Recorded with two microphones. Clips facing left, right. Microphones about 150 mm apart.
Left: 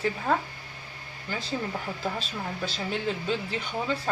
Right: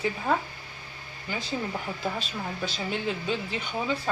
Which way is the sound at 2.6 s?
Centre (ahead or behind).